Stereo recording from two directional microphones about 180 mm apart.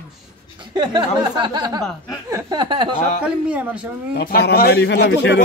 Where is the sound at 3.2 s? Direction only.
5° right (ahead or behind).